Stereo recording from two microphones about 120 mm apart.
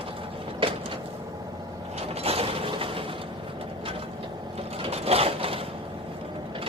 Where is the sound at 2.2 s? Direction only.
55° right (ahead or behind).